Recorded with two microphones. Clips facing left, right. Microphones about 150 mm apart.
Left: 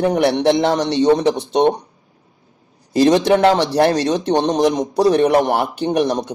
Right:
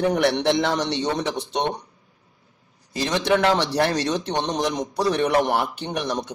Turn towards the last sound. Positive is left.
turn(degrees=35)  # may be behind; listen again after turning